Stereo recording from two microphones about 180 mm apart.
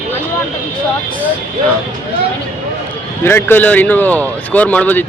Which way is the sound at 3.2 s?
10° left (ahead or behind).